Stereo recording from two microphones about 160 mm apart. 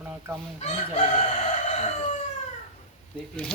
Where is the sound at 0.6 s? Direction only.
45° left (ahead or behind).